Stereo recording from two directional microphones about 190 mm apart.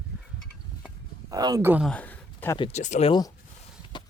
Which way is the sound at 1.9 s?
10° left (ahead or behind).